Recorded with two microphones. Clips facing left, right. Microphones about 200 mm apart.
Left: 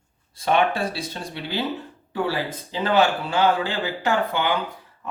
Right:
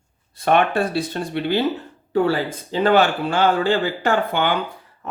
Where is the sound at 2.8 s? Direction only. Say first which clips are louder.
Right 3 dB; 55° right (ahead or behind).